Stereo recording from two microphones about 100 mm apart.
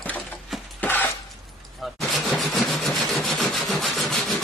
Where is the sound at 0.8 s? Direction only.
20° left (ahead or behind).